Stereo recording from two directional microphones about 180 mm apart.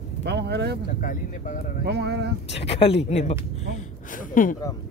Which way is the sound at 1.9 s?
65° right (ahead or behind).